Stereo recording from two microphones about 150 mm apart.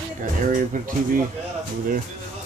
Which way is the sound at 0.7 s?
60° right (ahead or behind).